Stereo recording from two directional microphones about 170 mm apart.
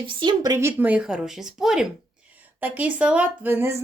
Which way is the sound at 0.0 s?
30° right (ahead or behind).